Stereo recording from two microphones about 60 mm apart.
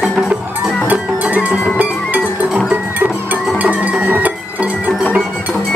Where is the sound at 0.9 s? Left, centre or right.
Right.